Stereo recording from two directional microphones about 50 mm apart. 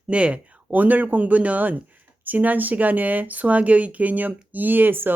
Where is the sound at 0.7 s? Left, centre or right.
Right.